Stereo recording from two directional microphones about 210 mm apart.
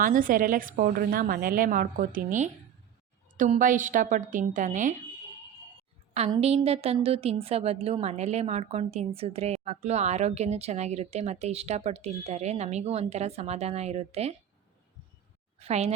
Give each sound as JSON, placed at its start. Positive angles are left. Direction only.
{"t": 0.0, "sound": "a woman's voice", "side_deg": -40}
{"t": 6.3, "sound": "a woman's voice", "side_deg": -30}
{"t": 15.5, "sound": "a woman's voice", "side_deg": -30}